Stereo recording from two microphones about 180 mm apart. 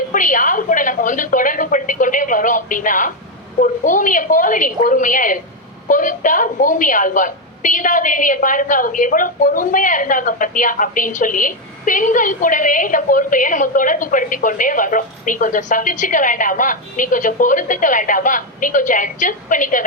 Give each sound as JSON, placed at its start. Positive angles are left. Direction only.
{"t": 0.1, "sound": "a woman's voice", "side_deg": 45}